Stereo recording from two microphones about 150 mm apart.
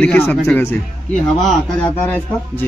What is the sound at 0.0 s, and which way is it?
Speech, 10° left (ahead or behind).